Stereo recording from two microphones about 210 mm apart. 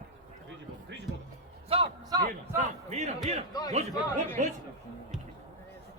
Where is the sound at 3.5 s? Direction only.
20° left (ahead or behind).